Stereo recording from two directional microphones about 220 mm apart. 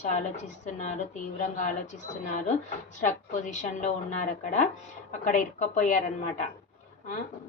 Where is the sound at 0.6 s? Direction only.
35° left (ahead or behind).